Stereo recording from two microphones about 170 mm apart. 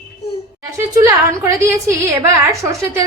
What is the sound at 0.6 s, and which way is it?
A woman's voice, 20° right (ahead or behind).